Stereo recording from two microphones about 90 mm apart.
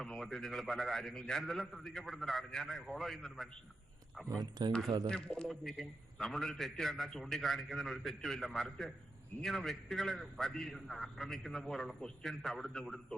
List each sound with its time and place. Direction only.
0.0 s a man's voice: 5° left (ahead or behind)
4.4 s speech: 50° right (ahead or behind)
5.0 s a man's voice: 10° left (ahead or behind)